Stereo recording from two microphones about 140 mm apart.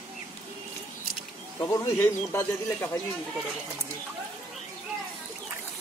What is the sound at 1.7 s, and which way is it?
Speech, 20° left (ahead or behind).